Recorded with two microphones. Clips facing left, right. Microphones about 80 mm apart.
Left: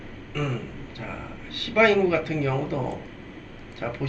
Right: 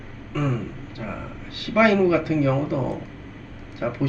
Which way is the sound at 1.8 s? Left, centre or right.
Centre.